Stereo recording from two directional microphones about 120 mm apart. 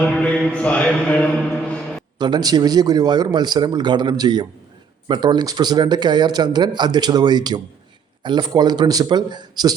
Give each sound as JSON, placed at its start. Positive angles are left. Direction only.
{"t": 0.0, "sound": "mantra", "side_deg": 10}
{"t": 2.1, "sound": "speech", "side_deg": -40}